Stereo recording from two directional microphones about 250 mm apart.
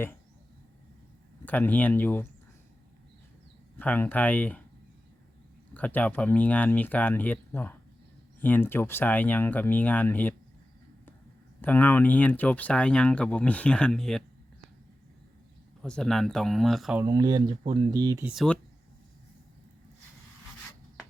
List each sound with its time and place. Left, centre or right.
1.5 s speech: centre
3.8 s speech: centre
5.7 s speech: centre
11.6 s speech: centre
15.8 s speech: centre
17.0 s speech: centre
18.3 s speech: centre